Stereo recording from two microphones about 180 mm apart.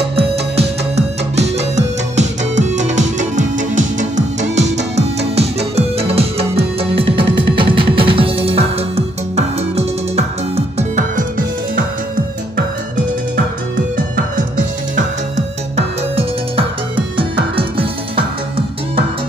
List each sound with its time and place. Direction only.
0.6 s music: 35° right (ahead or behind)
13.9 s music: 50° right (ahead or behind)
15.0 s music: 35° right (ahead or behind)